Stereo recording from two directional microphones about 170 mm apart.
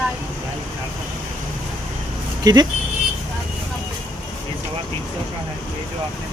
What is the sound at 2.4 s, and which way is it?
Speech, 20° right (ahead or behind).